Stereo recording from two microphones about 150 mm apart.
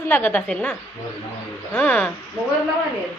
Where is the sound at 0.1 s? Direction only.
15° left (ahead or behind).